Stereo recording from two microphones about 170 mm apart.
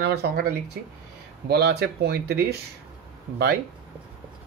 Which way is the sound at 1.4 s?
75° right (ahead or behind).